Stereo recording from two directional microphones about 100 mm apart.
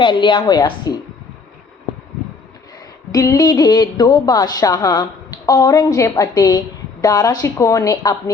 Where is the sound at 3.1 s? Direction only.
40° left (ahead or behind).